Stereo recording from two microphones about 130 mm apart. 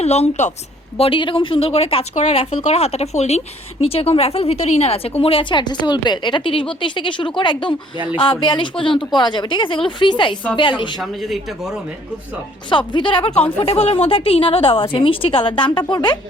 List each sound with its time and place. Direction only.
0.0 s a woman's voice: 55° left (ahead or behind)
0.9 s a woman's voice: 45° left (ahead or behind)
11.0 s speech: centre (ahead or behind)
12.7 s a woman's voice: 40° left (ahead or behind)